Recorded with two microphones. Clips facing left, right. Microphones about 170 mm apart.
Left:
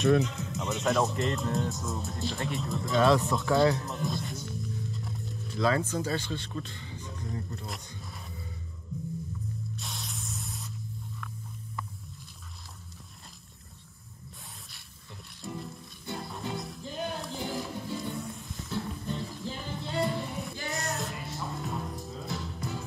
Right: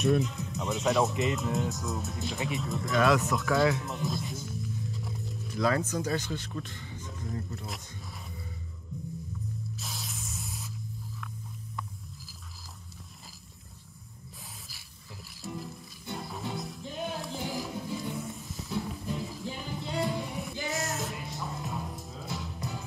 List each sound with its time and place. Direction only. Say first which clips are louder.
0.2 s music: left 1 dB; centre (ahead or behind)
5.9 s speech: even; 25° left (ahead or behind)
9.8 s spray: even; centre (ahead or behind)
15.4 s music: even; centre (ahead or behind)